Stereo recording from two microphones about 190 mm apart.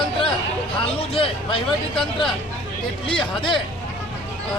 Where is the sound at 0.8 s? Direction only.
30° left (ahead or behind).